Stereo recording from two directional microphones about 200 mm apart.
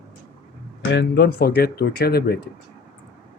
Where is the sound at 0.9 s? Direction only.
55° left (ahead or behind).